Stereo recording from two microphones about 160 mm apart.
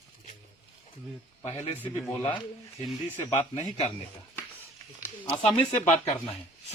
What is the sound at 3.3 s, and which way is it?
Speech, 40° left (ahead or behind).